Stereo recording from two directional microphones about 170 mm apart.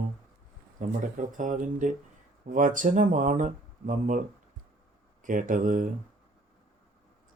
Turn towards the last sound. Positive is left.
turn(degrees=-50)  # may be behind; listen again after turning